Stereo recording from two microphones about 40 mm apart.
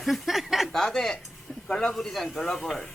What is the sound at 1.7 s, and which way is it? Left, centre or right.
Speech, left.